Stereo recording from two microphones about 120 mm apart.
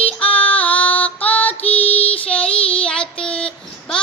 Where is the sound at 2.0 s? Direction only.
50° left (ahead or behind).